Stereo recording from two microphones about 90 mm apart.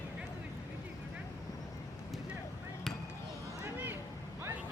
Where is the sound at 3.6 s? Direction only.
20° right (ahead or behind).